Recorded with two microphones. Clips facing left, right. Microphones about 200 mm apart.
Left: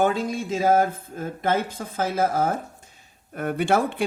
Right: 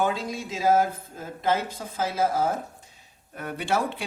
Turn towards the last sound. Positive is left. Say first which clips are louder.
# left 5 dB
turn(degrees=55)  # may be behind; listen again after turning